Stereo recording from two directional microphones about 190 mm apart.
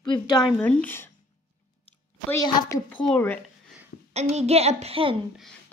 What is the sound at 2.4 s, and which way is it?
Speech, 15° left (ahead or behind).